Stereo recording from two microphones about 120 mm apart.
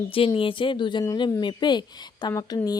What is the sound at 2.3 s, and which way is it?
Speech, 25° left (ahead or behind).